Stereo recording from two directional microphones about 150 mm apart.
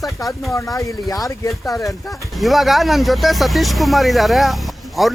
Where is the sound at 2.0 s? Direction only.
Centre (ahead or behind).